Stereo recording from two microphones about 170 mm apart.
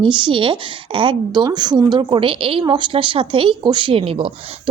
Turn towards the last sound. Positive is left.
turn(degrees=-30)  # may be behind; listen again after turning